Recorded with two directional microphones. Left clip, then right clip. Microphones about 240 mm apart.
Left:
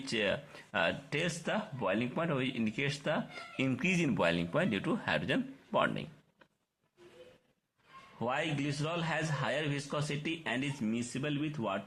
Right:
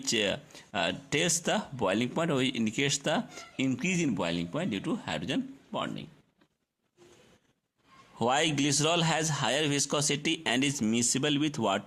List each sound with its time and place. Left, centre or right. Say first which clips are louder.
0.0 s speech: right 4 dB; right
3.7 s speech: right 2 dB; right
8.2 s a man's voice: right 7 dB; right